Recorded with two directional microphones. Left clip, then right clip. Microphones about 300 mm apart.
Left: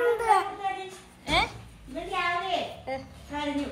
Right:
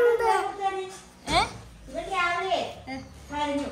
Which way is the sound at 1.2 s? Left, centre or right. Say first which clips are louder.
Right 1 dB; centre.